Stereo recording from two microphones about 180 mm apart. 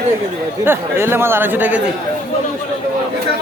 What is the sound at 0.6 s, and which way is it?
Speech, 10° right (ahead or behind).